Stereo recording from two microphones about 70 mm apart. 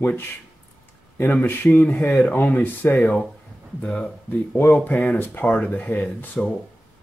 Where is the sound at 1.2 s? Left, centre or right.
Left.